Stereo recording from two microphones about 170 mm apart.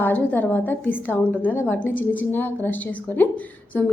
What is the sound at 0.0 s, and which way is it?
A woman's voice, 10° left (ahead or behind).